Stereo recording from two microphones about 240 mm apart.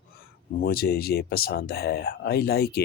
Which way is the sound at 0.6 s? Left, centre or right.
Left.